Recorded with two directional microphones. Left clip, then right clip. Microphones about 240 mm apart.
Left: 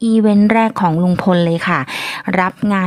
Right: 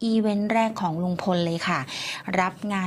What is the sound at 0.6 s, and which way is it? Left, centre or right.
Speech, left.